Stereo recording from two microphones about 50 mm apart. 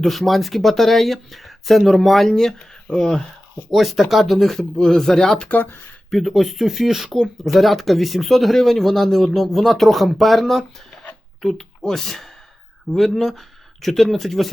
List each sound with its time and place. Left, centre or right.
0.0 s speech: centre
3.7 s speech: centre
5.4 s speech: left
6.1 s speech: centre